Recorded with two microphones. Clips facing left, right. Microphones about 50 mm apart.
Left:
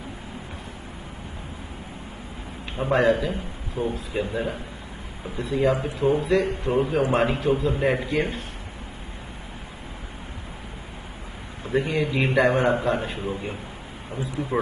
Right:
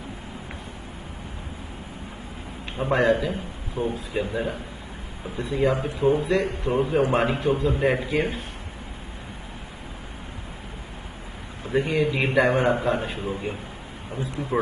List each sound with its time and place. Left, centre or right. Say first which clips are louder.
2.8 s a man's voice: left 1 dB; centre
3.8 s speech: even; left
4.1 s a man's voice: even; centre
11.7 s a man's voice: right 1 dB; centre